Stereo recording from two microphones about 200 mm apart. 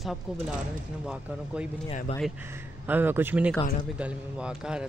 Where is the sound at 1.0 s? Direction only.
5° right (ahead or behind).